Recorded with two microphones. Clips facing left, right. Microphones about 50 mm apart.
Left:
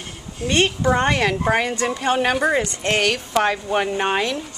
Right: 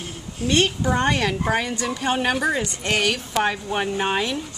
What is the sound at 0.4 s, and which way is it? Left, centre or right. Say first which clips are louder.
A woman's voice: left 1 dB; centre.